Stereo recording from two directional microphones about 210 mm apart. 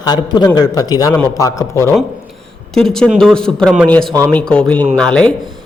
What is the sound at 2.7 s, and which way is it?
A man's voice, 5° left (ahead or behind).